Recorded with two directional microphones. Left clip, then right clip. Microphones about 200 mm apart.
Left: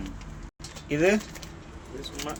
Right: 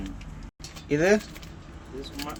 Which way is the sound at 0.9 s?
10° right (ahead or behind).